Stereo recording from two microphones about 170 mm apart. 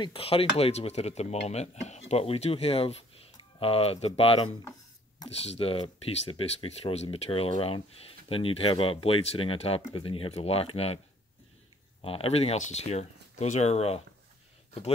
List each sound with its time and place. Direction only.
0.0 s speech: 35° left (ahead or behind)
12.0 s speech: 35° left (ahead or behind)